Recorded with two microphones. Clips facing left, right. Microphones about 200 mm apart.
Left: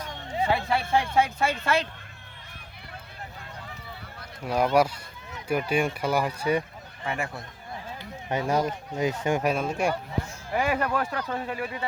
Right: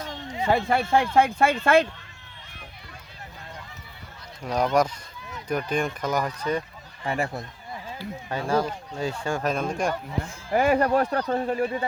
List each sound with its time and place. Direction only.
0.5 s speech: 50° right (ahead or behind)
4.4 s speech: 5° left (ahead or behind)
7.0 s speech: 35° right (ahead or behind)
7.9 s speech: 20° left (ahead or behind)
9.5 s speech: 5° left (ahead or behind)
10.2 s speech: 45° right (ahead or behind)